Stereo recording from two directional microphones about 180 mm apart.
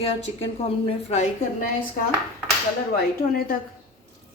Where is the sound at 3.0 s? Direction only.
55° left (ahead or behind).